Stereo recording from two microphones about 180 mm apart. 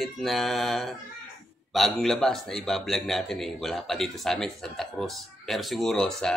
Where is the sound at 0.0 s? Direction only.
Centre (ahead or behind).